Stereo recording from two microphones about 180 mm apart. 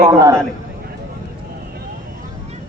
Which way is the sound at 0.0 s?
15° right (ahead or behind).